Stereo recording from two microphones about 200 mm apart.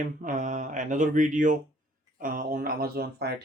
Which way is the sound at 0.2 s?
40° right (ahead or behind).